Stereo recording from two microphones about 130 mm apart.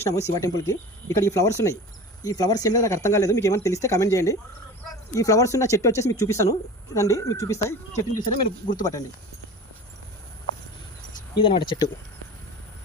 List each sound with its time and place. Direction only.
0.1 s speech: 25° left (ahead or behind)
8.4 s speech: 90° left
8.8 s speech: 25° left (ahead or behind)
11.3 s speech: 40° left (ahead or behind)